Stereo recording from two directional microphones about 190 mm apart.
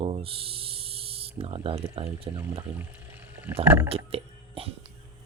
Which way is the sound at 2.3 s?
10° right (ahead or behind).